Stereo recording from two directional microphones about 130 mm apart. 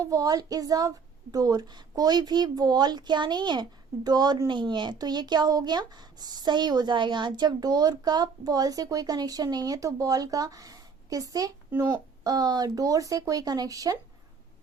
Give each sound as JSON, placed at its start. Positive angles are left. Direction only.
{"t": 0.0, "sound": "a woman's voice", "side_deg": -25}